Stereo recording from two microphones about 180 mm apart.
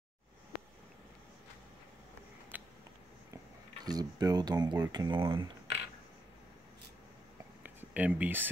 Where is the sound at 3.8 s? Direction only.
20° right (ahead or behind).